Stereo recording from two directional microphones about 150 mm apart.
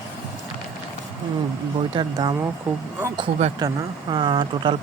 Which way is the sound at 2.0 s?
25° right (ahead or behind).